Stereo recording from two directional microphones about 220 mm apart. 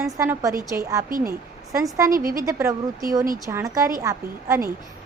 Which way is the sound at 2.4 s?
15° right (ahead or behind).